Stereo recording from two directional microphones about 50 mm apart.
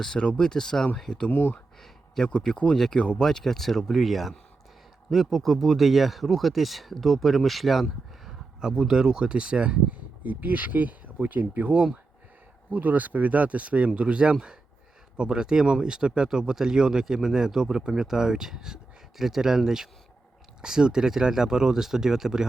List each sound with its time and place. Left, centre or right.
0.0 s speech: centre
1.3 s speech: left
1.8 s a sound: centre
2.4 s speech: centre
3.0 s speech: left
3.2 s speech: centre
10.2 s speech: right; by 22.4 s centre